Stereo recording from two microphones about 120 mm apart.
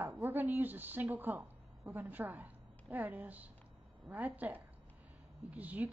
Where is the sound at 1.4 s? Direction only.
25° right (ahead or behind).